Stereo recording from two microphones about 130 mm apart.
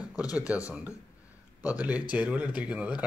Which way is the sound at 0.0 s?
30° left (ahead or behind).